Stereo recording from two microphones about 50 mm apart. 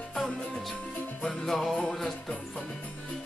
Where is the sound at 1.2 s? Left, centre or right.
Centre.